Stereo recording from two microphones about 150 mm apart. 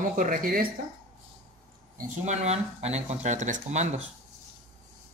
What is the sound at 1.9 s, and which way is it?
Speech, 50° right (ahead or behind).